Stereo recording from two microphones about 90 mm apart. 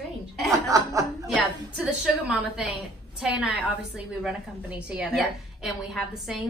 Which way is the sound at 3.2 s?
5° right (ahead or behind).